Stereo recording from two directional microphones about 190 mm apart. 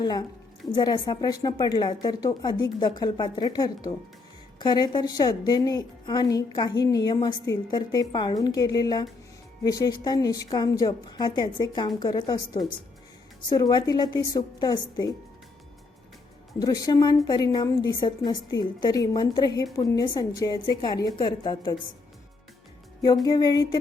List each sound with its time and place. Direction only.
0.0 s a woman's voice: 20° left (ahead or behind)
16.6 s a woman's voice: 20° left (ahead or behind)
23.2 s a woman's voice: 20° left (ahead or behind)